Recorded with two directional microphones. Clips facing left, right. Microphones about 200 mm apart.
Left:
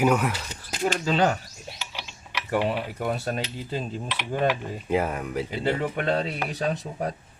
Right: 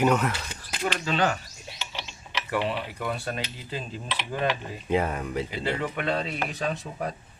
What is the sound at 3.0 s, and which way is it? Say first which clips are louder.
Cutlery: left 3 dB; 45° left (ahead or behind).